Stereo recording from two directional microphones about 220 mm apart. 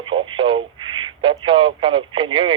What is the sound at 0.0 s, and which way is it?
Speech, 25° right (ahead or behind).